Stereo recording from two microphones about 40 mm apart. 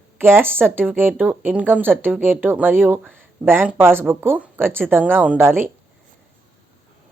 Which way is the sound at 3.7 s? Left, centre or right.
Right.